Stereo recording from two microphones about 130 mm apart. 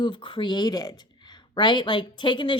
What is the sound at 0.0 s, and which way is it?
Speech, 35° left (ahead or behind).